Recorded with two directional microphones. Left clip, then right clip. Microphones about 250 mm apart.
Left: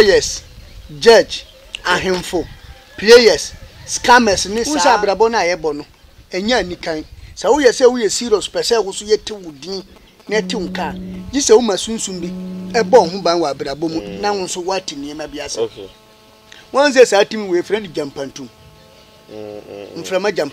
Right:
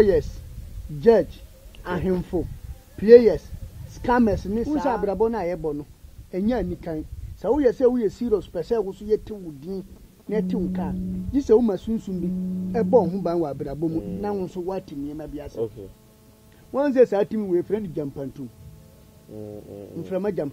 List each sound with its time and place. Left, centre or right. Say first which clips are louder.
0.0 s a man's voice: left 8 dB; centre
5.6 s a man's voice: left 8 dB; left
6.3 s speech: left 9 dB; centre
9.7 s a man's voice: left 7 dB; left
10.3 s speech: left 8 dB; centre
16.7 s speech: left 9 dB; centre
18.0 s a man's voice: left 7 dB; centre
19.3 s music: left 8 dB; left
20.0 s speech: left 9 dB; centre